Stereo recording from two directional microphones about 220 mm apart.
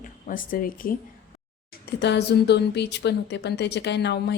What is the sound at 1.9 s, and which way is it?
Speech, 50° left (ahead or behind).